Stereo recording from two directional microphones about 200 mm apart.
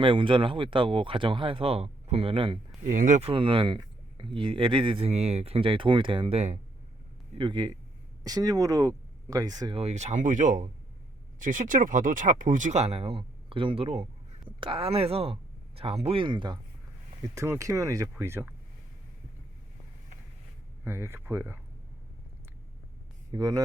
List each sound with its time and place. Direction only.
0.0 s speech: 25° right (ahead or behind)
2.8 s speech: 40° right (ahead or behind); by 18.5 s 10° right (ahead or behind)
20.8 s speech: 10° right (ahead or behind)
23.3 s speech: 20° right (ahead or behind)